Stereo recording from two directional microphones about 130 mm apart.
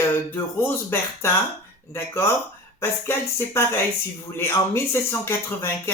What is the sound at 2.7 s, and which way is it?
Speech, 20° left (ahead or behind).